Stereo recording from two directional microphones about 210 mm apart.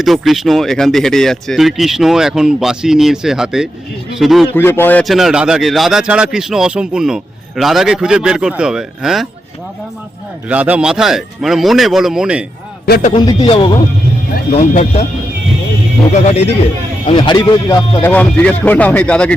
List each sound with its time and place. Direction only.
0.0 s a man's voice: centre (ahead or behind)
4.5 s a man's voice: 10° left (ahead or behind)
10.5 s a man's voice: 5° right (ahead or behind)
12.8 s a man's voice: 45° left (ahead or behind)
13.4 s speech: 25° left (ahead or behind)
14.5 s speech: 35° left (ahead or behind)
16.2 s speech: 30° left (ahead or behind)
18.0 s speech: 10° left (ahead or behind)